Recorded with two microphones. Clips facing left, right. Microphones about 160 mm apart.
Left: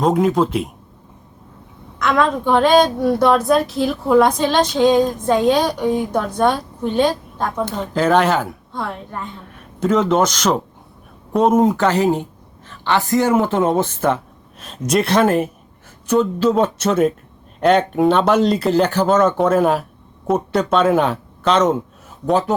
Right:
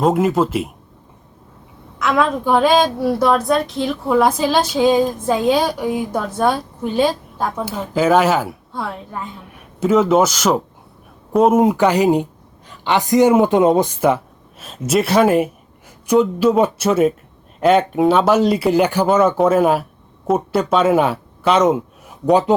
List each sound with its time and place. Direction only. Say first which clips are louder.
0.0 s a woman's voice: even; 5° right (ahead or behind)
2.0 s a woman's voice: even; 5° right (ahead or behind)